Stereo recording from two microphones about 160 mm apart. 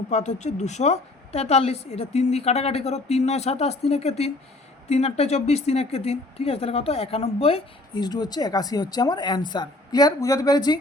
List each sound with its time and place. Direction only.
0.1 s a woman's voice: 45° left (ahead or behind)
7.9 s speech: 25° left (ahead or behind)